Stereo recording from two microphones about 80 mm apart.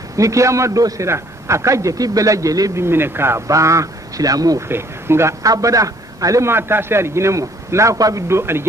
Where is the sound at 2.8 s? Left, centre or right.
Right.